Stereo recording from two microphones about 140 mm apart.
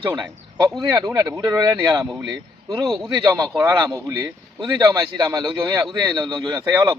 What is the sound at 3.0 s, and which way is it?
A man's voice, 30° right (ahead or behind).